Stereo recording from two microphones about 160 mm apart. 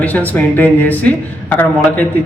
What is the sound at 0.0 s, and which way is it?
A woman's voice, 10° left (ahead or behind).